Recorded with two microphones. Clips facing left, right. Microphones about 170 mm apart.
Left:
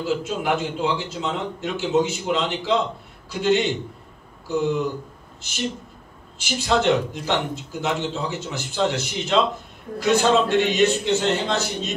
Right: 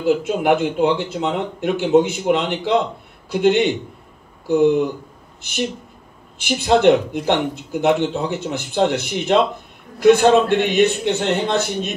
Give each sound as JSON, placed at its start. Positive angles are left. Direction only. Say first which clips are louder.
{"t": 0.0, "sound": "speech", "louder": "right 7 dB", "side_deg": -55}